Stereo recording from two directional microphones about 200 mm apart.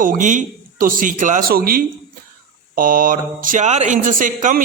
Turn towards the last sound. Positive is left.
turn(degrees=-40)  # may be behind; listen again after turning